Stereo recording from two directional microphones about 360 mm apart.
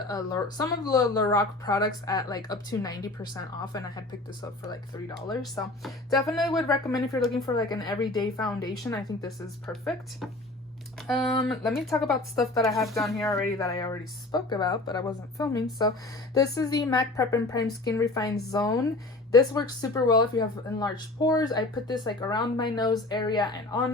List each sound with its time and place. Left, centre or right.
0.1 s speech: centre
11.0 s speech: centre